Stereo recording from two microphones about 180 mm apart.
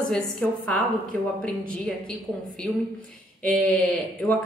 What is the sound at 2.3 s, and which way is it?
Speech, 20° right (ahead or behind).